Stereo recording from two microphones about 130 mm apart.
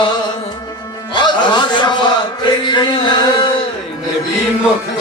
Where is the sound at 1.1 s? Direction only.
35° left (ahead or behind).